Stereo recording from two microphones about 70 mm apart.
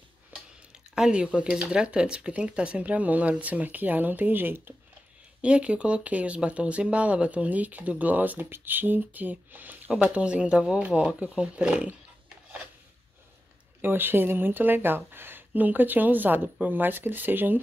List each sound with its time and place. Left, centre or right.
0.9 s speech: centre; by 4.7 s right
5.4 s speech: centre
13.7 s speech: right